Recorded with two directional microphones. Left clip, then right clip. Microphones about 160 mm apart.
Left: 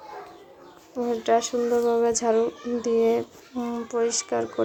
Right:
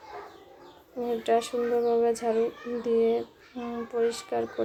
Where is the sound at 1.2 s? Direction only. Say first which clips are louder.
Left 3 dB; 10° left (ahead or behind).